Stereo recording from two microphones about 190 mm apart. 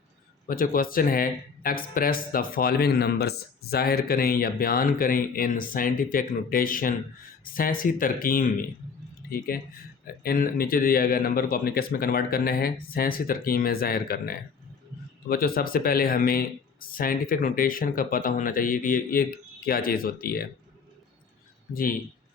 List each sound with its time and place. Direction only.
0.4 s speech: 50° left (ahead or behind)
9.5 s speech: 50° left (ahead or behind)
21.7 s speech: 50° left (ahead or behind)